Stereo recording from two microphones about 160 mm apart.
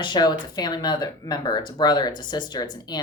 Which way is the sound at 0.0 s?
25° left (ahead or behind).